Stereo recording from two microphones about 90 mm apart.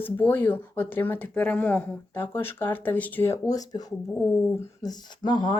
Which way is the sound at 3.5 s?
45° left (ahead or behind).